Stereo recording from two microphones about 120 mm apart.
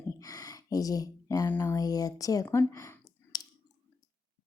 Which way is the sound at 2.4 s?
25° left (ahead or behind).